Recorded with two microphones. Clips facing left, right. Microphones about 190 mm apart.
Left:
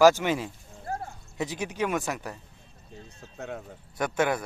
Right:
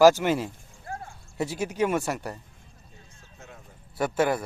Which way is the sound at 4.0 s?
5° right (ahead or behind).